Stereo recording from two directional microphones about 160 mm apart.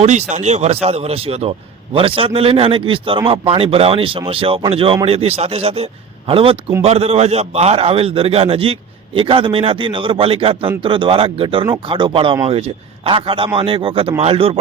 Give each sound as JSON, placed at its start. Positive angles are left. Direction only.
{"t": 0.0, "sound": "speech", "side_deg": -45}